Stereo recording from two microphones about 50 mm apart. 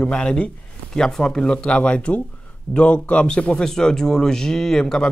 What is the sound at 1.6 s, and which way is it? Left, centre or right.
Speech, left.